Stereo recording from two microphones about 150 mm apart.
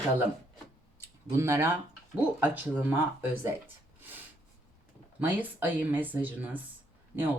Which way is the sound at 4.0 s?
15° right (ahead or behind).